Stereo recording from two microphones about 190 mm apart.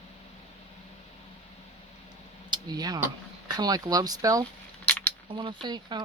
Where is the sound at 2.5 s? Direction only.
20° right (ahead or behind).